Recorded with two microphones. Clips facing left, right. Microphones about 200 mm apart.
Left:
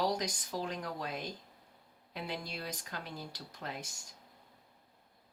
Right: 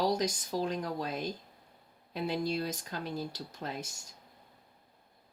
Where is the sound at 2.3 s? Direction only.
30° right (ahead or behind).